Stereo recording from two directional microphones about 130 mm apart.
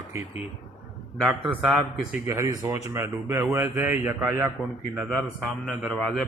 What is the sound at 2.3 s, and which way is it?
Speech, 25° right (ahead or behind).